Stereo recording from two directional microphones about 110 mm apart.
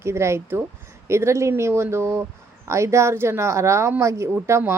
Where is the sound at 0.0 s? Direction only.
25° right (ahead or behind).